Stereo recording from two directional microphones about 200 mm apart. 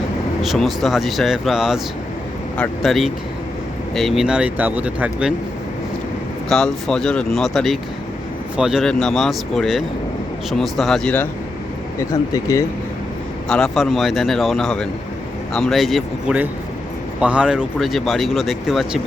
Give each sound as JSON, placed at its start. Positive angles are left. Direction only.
{"t": 0.4, "sound": "speech", "side_deg": 0}
{"t": 6.5, "sound": "speech", "side_deg": 0}
{"t": 12.3, "sound": "speech", "side_deg": 15}
{"t": 13.5, "sound": "speech", "side_deg": 0}